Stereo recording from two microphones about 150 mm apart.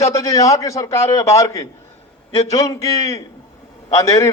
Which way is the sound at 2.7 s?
20° left (ahead or behind).